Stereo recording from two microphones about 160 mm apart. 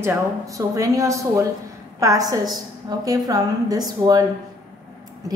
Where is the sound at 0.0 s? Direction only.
20° right (ahead or behind).